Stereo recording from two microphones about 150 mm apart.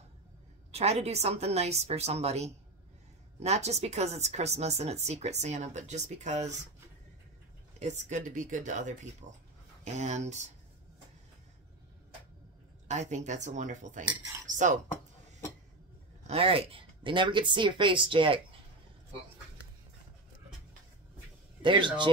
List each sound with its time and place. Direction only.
0.7 s speech: 45° right (ahead or behind)
7.8 s speech: 55° right (ahead or behind)
12.8 s speech: 50° right (ahead or behind)
14.0 s cutlery: 15° right (ahead or behind)
14.5 s dishes: 55° right (ahead or behind)
16.3 s speech: 40° right (ahead or behind)
21.6 s speech: 30° right (ahead or behind)